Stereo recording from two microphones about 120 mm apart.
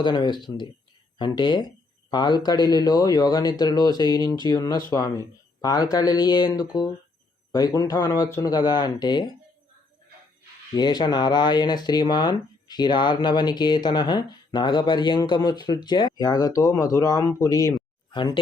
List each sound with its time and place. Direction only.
0.0 s speech: 40° left (ahead or behind)
10.8 s speech: 35° left (ahead or behind)